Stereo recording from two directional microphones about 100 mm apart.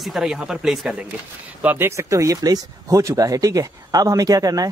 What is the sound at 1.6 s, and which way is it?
Speech, 20° right (ahead or behind).